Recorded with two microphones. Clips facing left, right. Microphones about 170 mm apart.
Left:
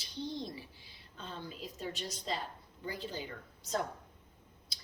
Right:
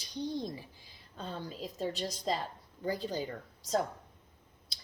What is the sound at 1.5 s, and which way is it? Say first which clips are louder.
A woman's voice: right 5 dB; 40° right (ahead or behind).